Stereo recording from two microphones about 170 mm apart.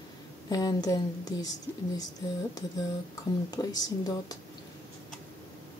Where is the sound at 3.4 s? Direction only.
20° left (ahead or behind).